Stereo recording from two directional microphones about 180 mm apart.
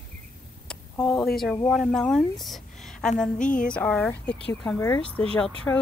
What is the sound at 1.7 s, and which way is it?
Speech, centre (ahead or behind).